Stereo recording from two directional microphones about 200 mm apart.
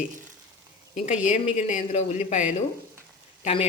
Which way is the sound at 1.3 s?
35° left (ahead or behind).